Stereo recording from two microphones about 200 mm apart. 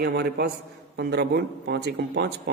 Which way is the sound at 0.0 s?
55° right (ahead or behind).